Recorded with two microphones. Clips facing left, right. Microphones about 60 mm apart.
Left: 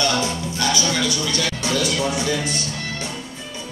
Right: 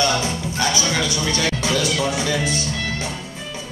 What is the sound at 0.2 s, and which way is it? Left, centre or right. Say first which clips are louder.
Music: right 1 dB; right.